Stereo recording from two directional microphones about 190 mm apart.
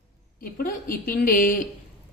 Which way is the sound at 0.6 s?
45° left (ahead or behind).